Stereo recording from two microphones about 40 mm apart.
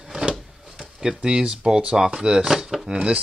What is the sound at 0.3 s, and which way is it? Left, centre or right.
Drawer open or close, centre.